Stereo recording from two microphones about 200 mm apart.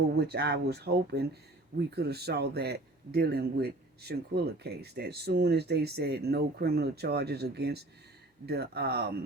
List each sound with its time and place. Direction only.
0.2 s a man's voice: 55° right (ahead or behind)